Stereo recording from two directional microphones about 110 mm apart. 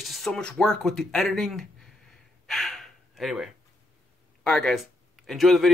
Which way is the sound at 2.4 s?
Centre (ahead or behind).